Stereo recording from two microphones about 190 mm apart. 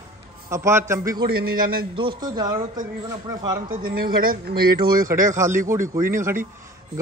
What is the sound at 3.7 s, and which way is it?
Speech, 50° right (ahead or behind).